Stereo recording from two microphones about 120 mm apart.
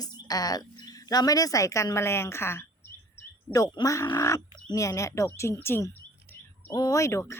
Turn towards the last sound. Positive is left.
turn(degrees=25)  # may be behind; listen again after turning